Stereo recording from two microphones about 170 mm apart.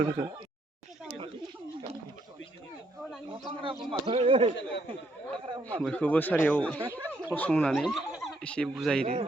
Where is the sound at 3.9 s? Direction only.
35° right (ahead or behind).